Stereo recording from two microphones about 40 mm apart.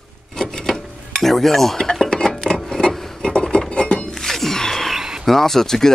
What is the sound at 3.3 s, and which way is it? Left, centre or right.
Music, left.